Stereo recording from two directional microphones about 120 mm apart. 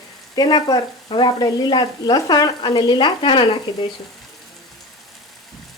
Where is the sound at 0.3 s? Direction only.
35° left (ahead or behind).